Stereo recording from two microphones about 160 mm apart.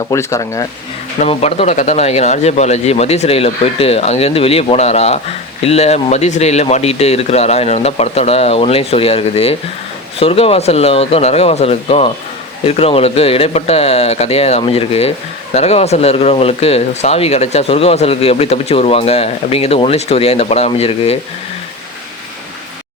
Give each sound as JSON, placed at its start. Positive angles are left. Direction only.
{"t": 0.1, "sound": "speech", "side_deg": 20}
{"t": 1.2, "sound": "speech", "side_deg": 40}